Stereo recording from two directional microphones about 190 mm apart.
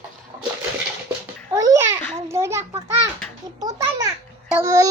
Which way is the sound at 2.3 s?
15° right (ahead or behind).